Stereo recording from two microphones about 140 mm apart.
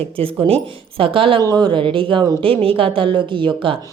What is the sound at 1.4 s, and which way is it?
A woman's voice, 30° right (ahead or behind).